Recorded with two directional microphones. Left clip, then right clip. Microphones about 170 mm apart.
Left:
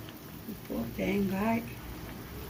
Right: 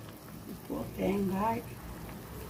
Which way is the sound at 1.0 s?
90° right.